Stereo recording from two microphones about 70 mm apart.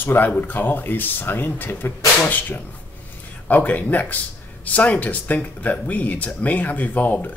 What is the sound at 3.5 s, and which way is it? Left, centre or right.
Speech, left.